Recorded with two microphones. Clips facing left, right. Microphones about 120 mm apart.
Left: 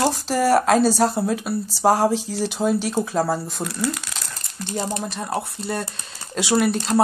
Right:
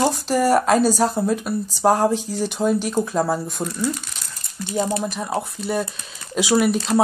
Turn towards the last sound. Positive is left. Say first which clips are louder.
# right 1 dB
turn(degrees=0)  # may be behind; listen again after turning